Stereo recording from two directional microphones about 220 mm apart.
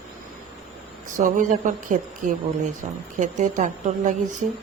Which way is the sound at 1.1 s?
35° right (ahead or behind).